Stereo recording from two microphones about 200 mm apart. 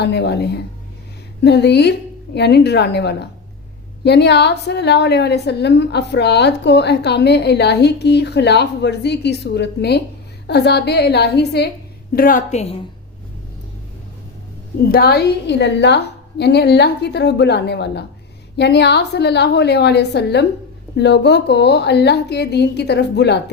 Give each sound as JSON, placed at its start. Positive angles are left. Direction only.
{"t": 0.0, "sound": "a woman's voice", "side_deg": 55}
{"t": 12.1, "sound": "a woman's voice", "side_deg": 45}
{"t": 14.8, "sound": "a woman's voice", "side_deg": 50}